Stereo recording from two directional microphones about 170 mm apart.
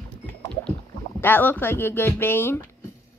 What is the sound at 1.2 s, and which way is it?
Speech, 10° left (ahead or behind).